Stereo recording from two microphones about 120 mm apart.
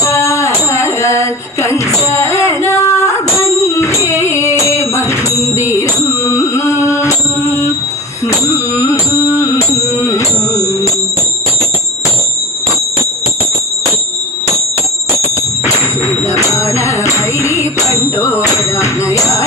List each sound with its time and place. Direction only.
0.0 s music: 25° left (ahead or behind)
15.6 s music: 25° left (ahead or behind)
18.2 s a sound: 25° left (ahead or behind)